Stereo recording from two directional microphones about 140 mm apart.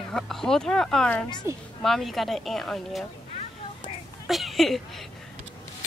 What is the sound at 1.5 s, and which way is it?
Speech, 20° right (ahead or behind).